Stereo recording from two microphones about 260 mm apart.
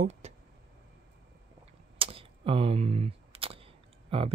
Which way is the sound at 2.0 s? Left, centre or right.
Right.